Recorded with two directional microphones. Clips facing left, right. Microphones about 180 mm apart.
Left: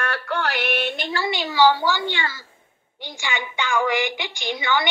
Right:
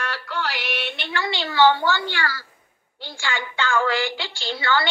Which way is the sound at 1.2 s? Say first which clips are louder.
Even; 20° left (ahead or behind).